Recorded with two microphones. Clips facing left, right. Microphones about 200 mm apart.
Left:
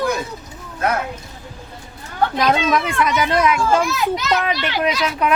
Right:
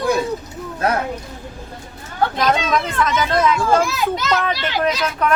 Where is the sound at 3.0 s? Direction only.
10° left (ahead or behind).